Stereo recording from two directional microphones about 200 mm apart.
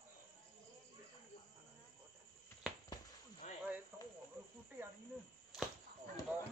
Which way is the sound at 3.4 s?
35° left (ahead or behind).